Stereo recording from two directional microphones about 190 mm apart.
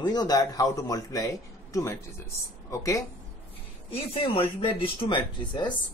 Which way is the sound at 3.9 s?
30° left (ahead or behind).